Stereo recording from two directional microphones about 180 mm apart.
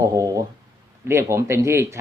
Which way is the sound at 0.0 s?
20° right (ahead or behind).